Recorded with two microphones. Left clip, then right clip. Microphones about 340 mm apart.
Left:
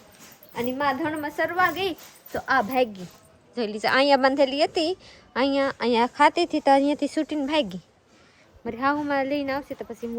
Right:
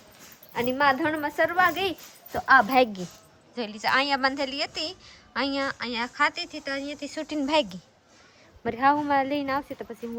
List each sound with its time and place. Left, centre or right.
0.5 s a woman's voice: centre
2.6 s a woman's voice: right
3.5 s a woman's voice: centre